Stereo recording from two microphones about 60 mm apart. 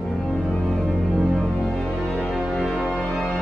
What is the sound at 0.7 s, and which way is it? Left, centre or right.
Music, centre.